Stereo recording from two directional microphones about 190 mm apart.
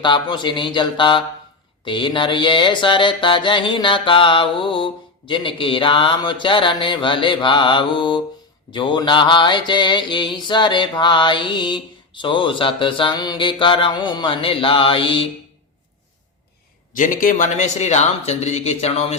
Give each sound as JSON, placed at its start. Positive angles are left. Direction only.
{"t": 0.0, "sound": "mantra", "side_deg": 25}
{"t": 17.0, "sound": "speech", "side_deg": 45}